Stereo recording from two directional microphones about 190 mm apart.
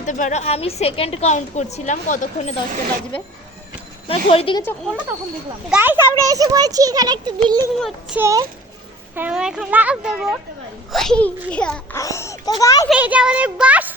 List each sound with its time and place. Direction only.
0.0 s a woman's voice: 40° left (ahead or behind)
4.1 s speech: 30° left (ahead or behind)
5.7 s a child's voice: 10° right (ahead or behind)
7.8 s speech: centre (ahead or behind)
8.2 s a child's voice: 15° right (ahead or behind)
9.1 s speech: 5° right (ahead or behind); by 12.9 s 15° left (ahead or behind)
12.9 s a child's voice: 5° right (ahead or behind)